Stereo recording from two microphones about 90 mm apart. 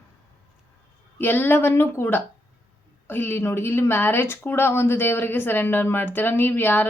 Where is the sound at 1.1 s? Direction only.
20° left (ahead or behind).